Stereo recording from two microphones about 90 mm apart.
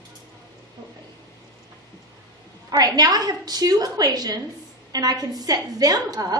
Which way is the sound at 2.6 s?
45° right (ahead or behind).